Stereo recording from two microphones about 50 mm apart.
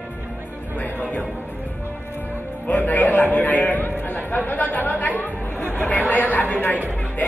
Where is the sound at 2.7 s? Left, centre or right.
Left.